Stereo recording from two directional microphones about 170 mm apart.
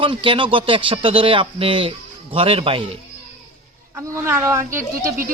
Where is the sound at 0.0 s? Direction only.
30° right (ahead or behind).